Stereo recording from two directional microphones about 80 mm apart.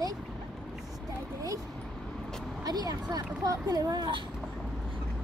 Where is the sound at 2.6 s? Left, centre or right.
Right.